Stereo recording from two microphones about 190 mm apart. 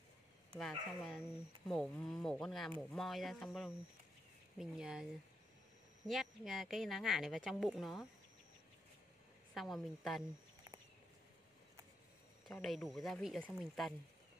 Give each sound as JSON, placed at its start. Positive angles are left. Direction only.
{"t": 0.6, "sound": "speech", "side_deg": 0}
{"t": 6.0, "sound": "speech", "side_deg": 0}
{"t": 9.5, "sound": "speech", "side_deg": 0}
{"t": 12.6, "sound": "speech", "side_deg": 0}